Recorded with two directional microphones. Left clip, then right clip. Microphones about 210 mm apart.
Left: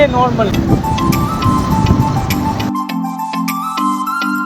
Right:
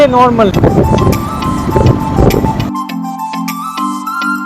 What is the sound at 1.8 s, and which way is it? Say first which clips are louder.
Music: right 5 dB; centre (ahead or behind).